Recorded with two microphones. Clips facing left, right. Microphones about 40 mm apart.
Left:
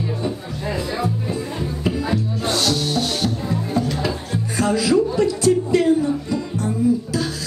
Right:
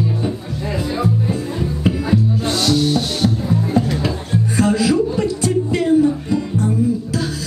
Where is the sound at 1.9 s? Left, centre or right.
Centre.